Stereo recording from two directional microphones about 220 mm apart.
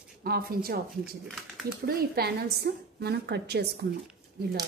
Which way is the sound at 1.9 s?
45° right (ahead or behind).